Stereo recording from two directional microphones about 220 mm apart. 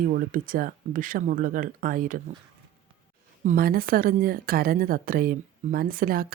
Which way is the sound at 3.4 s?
40° right (ahead or behind).